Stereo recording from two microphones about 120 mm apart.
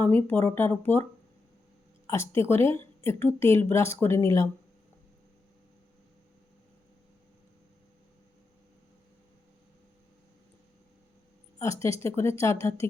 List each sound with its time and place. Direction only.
0.0 s speech: 15° left (ahead or behind)
2.0 s a woman's voice: 20° left (ahead or behind)
11.6 s a woman's voice: 25° left (ahead or behind)